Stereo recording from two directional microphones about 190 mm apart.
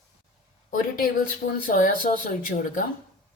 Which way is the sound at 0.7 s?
50° left (ahead or behind).